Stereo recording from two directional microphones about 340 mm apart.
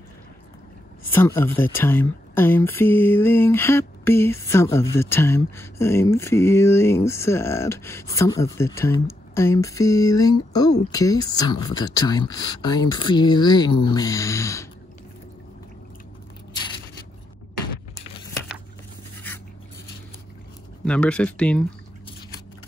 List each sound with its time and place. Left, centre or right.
1.1 s speech: centre
20.8 s speech: centre